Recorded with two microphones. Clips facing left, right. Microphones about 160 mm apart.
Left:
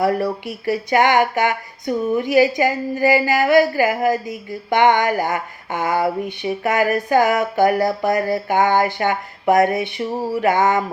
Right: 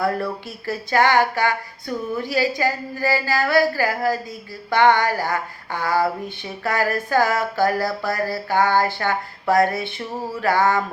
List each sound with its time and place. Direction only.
0.0 s speech: 15° left (ahead or behind)